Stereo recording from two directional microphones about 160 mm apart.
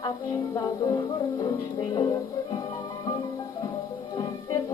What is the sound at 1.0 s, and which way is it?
Music, 25° left (ahead or behind).